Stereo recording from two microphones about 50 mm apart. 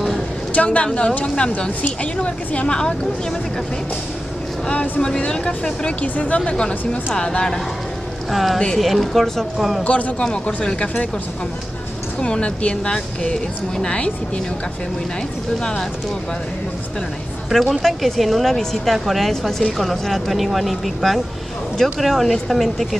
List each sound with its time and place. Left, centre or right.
0.5 s a woman's voice: left
4.6 s a woman's voice: centre
6.7 s speech: left
7.2 s speech: centre
8.3 s speech: centre
9.8 s a woman's voice: left
10.2 s speech: centre
12.2 s a woman's voice: centre
15.6 s speech: centre
17.5 s speech: centre